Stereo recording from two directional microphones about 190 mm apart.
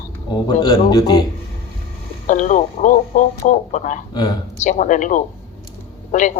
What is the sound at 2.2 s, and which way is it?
Speech, 40° left (ahead or behind).